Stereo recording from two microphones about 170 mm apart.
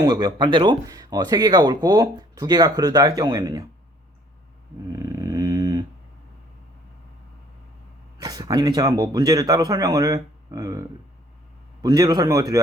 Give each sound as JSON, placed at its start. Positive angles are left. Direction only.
{"t": 0.0, "sound": "speech", "side_deg": -25}
{"t": 4.9, "sound": "a sound", "side_deg": -20}
{"t": 8.2, "sound": "speech", "side_deg": -20}